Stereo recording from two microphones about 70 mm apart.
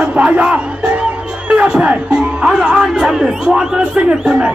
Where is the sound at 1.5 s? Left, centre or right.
Centre.